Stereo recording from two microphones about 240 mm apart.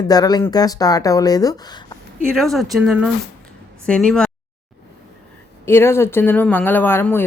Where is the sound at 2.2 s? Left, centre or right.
Centre.